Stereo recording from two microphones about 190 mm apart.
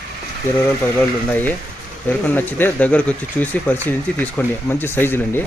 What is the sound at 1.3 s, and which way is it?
Speech, 10° left (ahead or behind).